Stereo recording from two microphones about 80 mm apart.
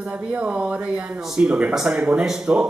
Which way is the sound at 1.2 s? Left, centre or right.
Centre.